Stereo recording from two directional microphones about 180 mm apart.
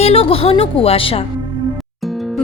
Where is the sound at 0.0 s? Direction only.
35° left (ahead or behind).